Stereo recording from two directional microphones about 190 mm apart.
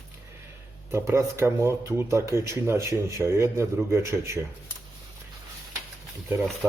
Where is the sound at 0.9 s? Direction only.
15° right (ahead or behind).